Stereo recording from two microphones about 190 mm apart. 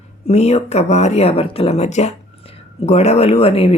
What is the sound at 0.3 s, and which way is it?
Speech, 35° left (ahead or behind).